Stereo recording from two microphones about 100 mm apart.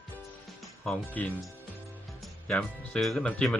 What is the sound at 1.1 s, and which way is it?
Speech, 15° left (ahead or behind).